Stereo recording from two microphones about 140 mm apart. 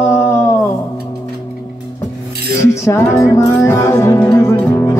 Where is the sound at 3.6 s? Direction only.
20° left (ahead or behind).